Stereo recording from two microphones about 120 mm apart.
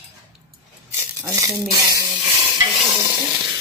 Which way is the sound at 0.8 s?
25° right (ahead or behind).